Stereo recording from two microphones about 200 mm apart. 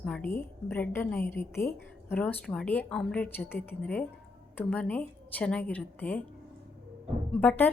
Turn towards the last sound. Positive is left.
turn(degrees=10)  # may be behind; listen again after turning